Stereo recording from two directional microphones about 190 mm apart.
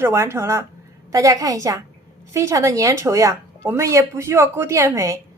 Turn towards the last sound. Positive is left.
turn(degrees=-15)  # may be behind; listen again after turning